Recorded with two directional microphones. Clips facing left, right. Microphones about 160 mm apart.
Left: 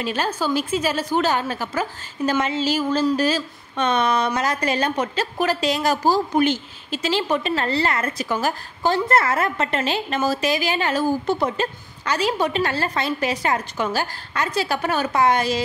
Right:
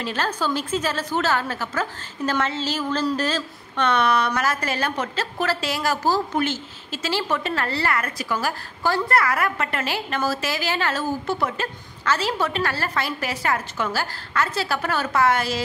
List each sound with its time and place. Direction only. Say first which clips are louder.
0.0 s a woman's voice: left 2 dB; 15° left (ahead or behind)